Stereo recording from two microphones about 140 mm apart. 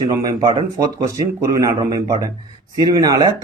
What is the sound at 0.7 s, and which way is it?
A man's voice, 25° right (ahead or behind).